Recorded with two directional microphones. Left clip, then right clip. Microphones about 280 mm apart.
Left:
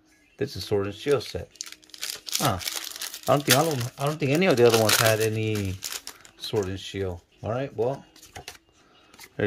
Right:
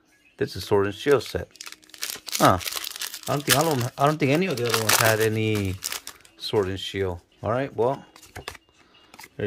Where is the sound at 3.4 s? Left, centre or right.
Centre.